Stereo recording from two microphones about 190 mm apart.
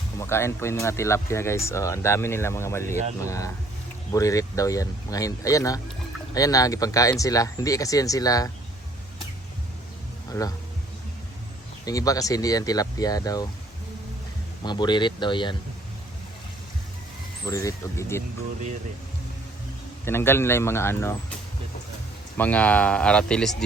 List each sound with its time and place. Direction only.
0.2 s speech: 15° left (ahead or behind)
11.9 s speech: 20° left (ahead or behind)
14.6 s speech: 25° left (ahead or behind)
17.4 s speech: 15° left (ahead or behind)
20.1 s speech: 10° left (ahead or behind)
22.4 s speech: 10° left (ahead or behind)